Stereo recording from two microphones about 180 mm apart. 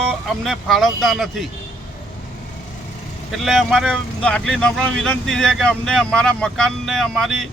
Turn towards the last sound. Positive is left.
turn(degrees=0)  # may be behind; listen again after turning